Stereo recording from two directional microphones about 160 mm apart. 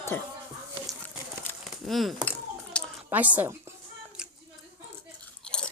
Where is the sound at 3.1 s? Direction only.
10° right (ahead or behind).